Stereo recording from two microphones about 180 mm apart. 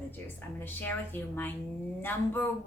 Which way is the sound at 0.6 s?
10° left (ahead or behind).